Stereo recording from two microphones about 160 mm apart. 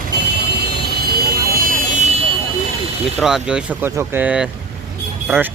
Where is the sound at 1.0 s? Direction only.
70° right (ahead or behind); by 2.1 s 55° right (ahead or behind).